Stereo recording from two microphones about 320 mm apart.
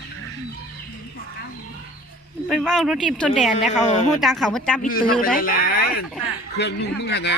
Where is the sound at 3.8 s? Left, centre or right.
Left.